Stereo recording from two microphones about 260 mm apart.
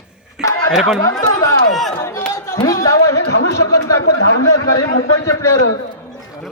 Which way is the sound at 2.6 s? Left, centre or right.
Centre.